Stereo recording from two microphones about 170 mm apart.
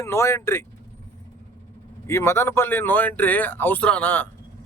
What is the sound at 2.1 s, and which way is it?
Speech, 15° left (ahead or behind).